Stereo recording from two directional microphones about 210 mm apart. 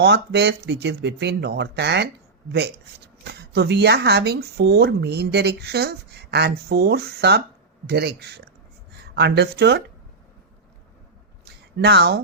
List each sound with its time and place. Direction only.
0.0 s speech: 55° right (ahead or behind)
3.2 s speech: 50° right (ahead or behind)
11.8 s speech: 50° right (ahead or behind)